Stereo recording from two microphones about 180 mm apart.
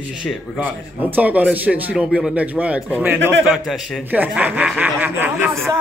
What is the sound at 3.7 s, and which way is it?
Speech, centre (ahead or behind).